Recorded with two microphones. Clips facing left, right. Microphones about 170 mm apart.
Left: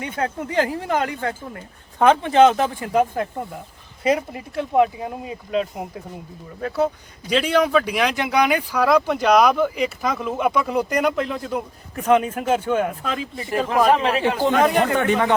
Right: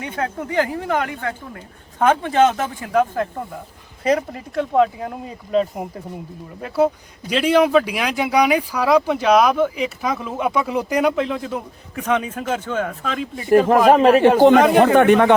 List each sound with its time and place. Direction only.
0.5 s speech: 20° left (ahead or behind)
4.7 s speech: 10° left (ahead or behind)
13.7 s a man's voice: 45° right (ahead or behind)
14.5 s speech: centre (ahead or behind)
14.8 s speech: 65° right (ahead or behind)